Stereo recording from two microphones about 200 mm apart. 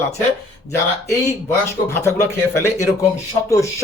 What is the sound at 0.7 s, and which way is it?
Speech, 15° left (ahead or behind).